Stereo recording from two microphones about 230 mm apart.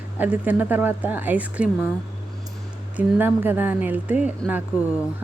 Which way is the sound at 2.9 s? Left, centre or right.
Centre.